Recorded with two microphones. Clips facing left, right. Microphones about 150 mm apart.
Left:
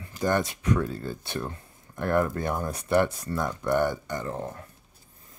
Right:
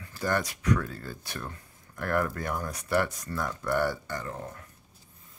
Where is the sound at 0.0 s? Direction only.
20° left (ahead or behind).